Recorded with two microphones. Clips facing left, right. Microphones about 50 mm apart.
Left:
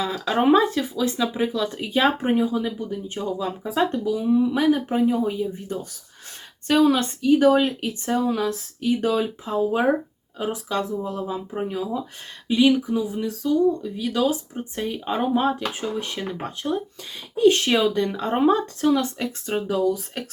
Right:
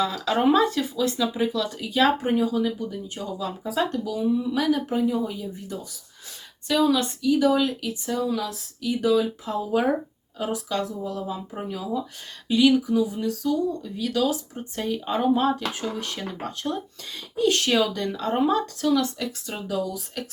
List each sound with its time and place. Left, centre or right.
0.0 s speech: left
9.4 s speech: left